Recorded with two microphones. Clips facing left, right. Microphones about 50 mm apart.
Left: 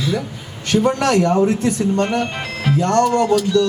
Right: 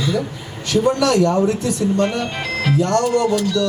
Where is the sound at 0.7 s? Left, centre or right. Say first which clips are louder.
Even; left.